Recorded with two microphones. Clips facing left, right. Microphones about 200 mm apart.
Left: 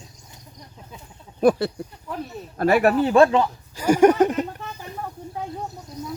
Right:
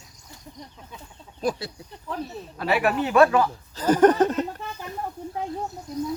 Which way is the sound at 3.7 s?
10° left (ahead or behind).